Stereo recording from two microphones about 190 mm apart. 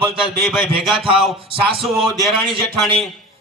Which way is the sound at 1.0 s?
30° right (ahead or behind).